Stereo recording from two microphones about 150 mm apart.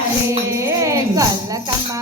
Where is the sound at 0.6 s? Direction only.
20° right (ahead or behind).